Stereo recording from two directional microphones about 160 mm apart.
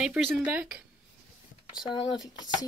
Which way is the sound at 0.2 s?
5° right (ahead or behind).